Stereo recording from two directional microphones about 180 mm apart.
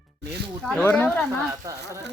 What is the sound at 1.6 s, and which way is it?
Speech, 20° right (ahead or behind).